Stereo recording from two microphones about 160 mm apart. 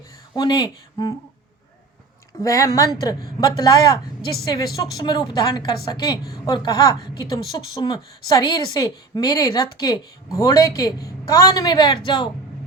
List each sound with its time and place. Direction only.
0.3 s a woman's voice: 25° left (ahead or behind)
2.4 s a woman's voice: 20° left (ahead or behind)
4.2 s a woman's voice: 75° left (ahead or behind)
4.8 s a woman's voice: 25° left (ahead or behind)